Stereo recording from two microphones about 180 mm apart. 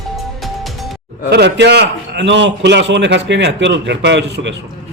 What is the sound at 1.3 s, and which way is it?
A man's voice, 65° right (ahead or behind).